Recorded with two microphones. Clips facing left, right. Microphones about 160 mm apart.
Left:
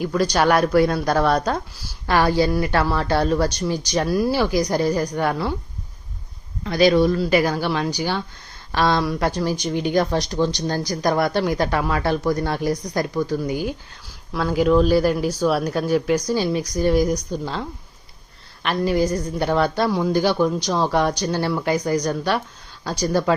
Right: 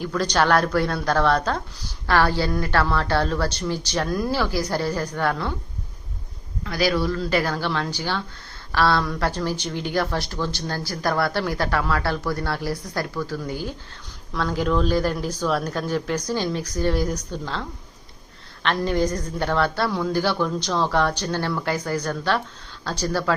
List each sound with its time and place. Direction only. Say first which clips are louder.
0.0 s speech: left 3 dB; 15° left (ahead or behind)
6.7 s speech: left 7 dB; 25° left (ahead or behind)